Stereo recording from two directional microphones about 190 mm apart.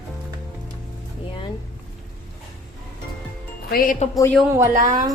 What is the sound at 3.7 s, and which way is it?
Speech, 50° left (ahead or behind).